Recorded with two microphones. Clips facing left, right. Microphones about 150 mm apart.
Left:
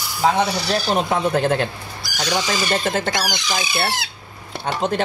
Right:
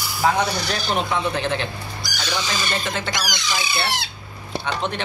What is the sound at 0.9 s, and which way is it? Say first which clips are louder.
Speech: left 2 dB; 40° left (ahead or behind).